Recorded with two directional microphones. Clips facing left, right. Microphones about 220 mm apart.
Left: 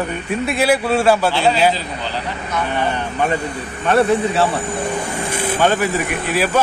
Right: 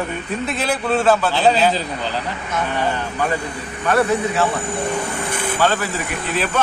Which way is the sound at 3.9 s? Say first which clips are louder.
Left 3 dB; 25° left (ahead or behind).